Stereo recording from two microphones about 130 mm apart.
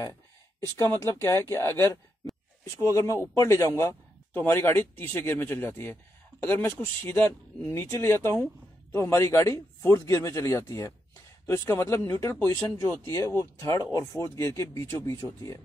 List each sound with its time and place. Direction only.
0.7 s a man's voice: 20° left (ahead or behind)